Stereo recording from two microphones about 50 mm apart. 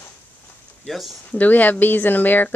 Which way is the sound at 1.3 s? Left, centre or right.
Left.